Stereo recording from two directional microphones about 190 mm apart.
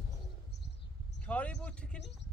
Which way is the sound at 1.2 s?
5° left (ahead or behind).